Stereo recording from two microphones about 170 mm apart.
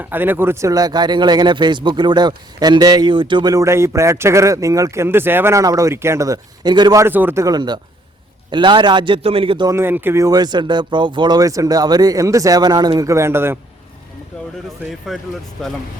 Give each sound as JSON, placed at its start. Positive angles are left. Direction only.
{"t": 0.0, "sound": "speech", "side_deg": -10}
{"t": 9.7, "sound": "speech", "side_deg": -15}
{"t": 15.1, "sound": "speech", "side_deg": 0}